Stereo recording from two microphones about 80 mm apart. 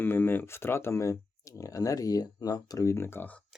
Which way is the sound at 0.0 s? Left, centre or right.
Left.